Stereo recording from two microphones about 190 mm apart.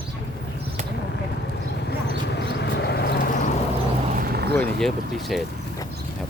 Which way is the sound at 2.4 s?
60° left (ahead or behind).